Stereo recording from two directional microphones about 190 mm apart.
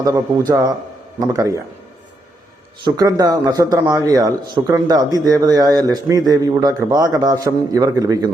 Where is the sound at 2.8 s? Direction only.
20° right (ahead or behind).